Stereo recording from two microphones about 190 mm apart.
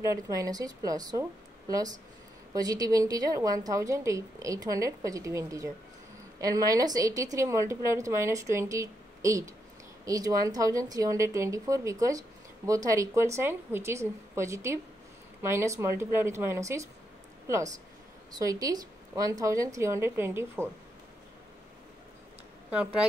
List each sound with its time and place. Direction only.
0.0 s a woman's voice: 15° right (ahead or behind)
18.3 s speech: 20° right (ahead or behind)